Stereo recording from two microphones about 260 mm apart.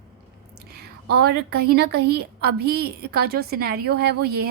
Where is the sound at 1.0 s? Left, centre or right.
Right.